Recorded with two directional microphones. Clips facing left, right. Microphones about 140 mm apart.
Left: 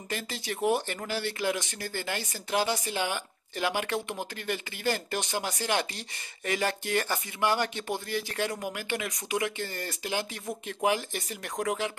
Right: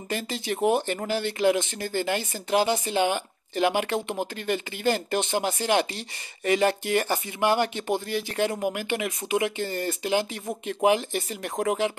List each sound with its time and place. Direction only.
0.1 s speech: 20° right (ahead or behind)